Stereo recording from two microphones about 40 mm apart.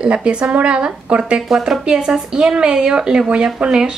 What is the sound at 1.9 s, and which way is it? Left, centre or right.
Speech, centre.